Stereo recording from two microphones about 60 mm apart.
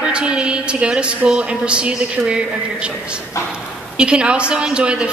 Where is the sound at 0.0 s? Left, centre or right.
Centre.